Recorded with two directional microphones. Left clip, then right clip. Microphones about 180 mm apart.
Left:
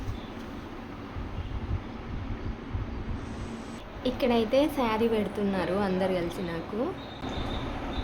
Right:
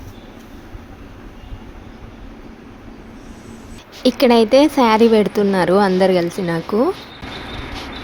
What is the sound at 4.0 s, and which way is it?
A woman's voice, 55° right (ahead or behind).